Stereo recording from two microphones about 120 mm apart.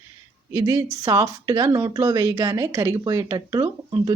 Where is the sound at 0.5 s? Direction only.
30° right (ahead or behind).